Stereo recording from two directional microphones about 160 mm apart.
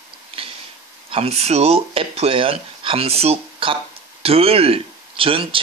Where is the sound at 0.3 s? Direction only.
35° right (ahead or behind).